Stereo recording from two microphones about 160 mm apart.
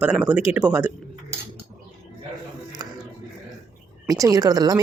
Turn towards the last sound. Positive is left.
turn(degrees=-20)  # may be behind; listen again after turning